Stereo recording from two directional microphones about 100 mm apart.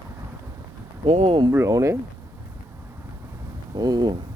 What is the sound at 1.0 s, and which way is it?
Speech, 90° right.